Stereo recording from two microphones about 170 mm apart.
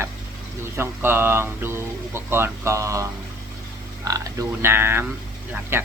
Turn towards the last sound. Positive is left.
turn(degrees=-15)  # may be behind; listen again after turning